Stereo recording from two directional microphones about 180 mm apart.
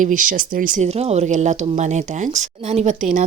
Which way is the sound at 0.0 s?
50° right (ahead or behind).